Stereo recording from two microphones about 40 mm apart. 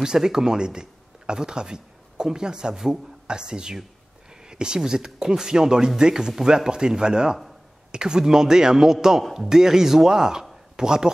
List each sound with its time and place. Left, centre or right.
0.0 s a man's voice: centre